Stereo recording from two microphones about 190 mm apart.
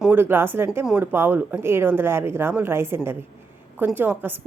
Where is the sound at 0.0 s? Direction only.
10° right (ahead or behind).